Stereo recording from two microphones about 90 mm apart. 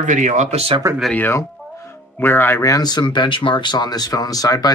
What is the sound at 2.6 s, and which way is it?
Speech, 45° left (ahead or behind).